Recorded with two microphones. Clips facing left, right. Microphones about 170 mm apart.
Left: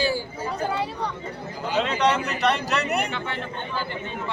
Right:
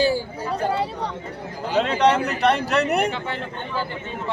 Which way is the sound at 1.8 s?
55° right (ahead or behind).